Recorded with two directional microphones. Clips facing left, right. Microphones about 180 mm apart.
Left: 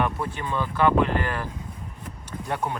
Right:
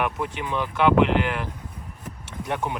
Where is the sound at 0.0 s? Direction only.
15° right (ahead or behind).